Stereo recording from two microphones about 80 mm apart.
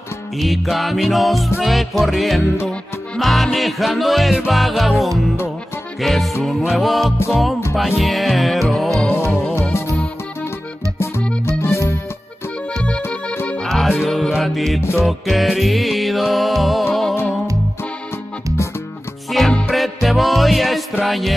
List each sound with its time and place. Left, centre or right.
0.4 s music: centre
9.5 s music: left
11.4 s music: left
12.7 s accordion: centre
13.8 s music: centre
19.3 s music: centre